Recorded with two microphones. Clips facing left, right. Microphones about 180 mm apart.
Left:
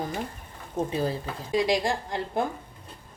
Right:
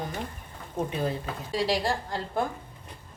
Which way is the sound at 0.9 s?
35° left (ahead or behind).